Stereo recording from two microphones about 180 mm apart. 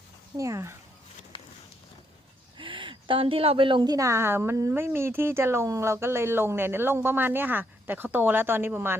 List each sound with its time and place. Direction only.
0.3 s a woman's voice: 15° right (ahead or behind)
2.6 s a woman's voice: 30° right (ahead or behind); by 9.0 s 10° right (ahead or behind)